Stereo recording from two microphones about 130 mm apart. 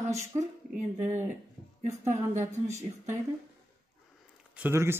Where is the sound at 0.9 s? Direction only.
65° right (ahead or behind).